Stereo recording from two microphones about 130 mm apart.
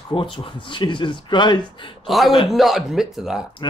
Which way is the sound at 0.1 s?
40° left (ahead or behind).